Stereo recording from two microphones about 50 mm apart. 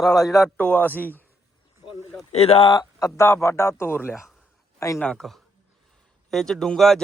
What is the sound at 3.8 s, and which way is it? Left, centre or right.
Speech, left.